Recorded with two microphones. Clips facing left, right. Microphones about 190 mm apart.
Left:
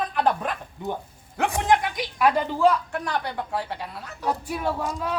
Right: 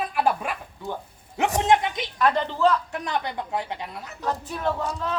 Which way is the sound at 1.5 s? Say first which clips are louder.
Right 1 dB; 20° right (ahead or behind).